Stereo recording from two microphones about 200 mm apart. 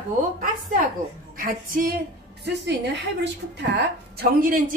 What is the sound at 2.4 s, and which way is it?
A woman's voice, 60° right (ahead or behind).